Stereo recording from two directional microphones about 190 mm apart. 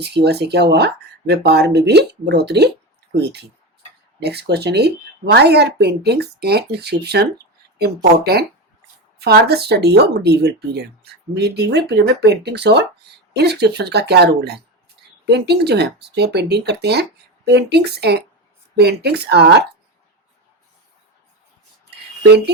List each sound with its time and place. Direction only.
0.0 s speech: 60° right (ahead or behind)